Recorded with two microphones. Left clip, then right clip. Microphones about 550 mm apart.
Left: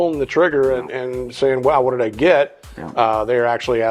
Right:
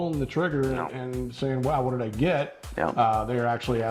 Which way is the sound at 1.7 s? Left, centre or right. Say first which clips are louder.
Left 11 dB; left.